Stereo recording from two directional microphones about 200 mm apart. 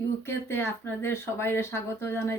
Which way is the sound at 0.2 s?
10° left (ahead or behind).